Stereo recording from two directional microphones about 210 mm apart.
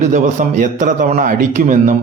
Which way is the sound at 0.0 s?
35° right (ahead or behind).